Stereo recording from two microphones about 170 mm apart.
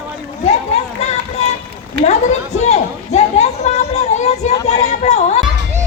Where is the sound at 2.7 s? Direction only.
40° left (ahead or behind).